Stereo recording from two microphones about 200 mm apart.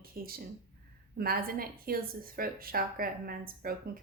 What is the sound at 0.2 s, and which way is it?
A woman's voice, 45° right (ahead or behind).